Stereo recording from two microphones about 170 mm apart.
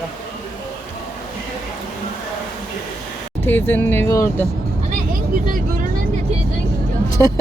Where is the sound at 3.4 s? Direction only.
10° left (ahead or behind).